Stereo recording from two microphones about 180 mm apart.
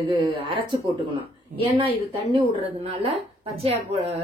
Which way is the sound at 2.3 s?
30° right (ahead or behind).